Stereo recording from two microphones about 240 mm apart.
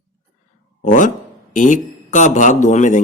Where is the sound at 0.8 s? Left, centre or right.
Left.